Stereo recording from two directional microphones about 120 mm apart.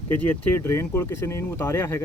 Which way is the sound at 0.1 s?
20° left (ahead or behind).